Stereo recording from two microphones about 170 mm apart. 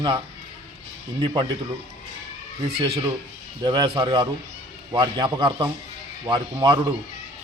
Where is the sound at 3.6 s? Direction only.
25° right (ahead or behind).